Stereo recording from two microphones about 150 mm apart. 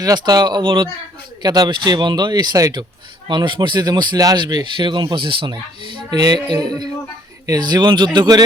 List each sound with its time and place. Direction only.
0.0 s speech: 25° right (ahead or behind)